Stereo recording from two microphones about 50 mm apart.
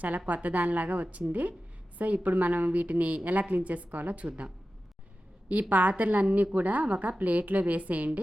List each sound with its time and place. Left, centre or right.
0.3 s a woman's voice: right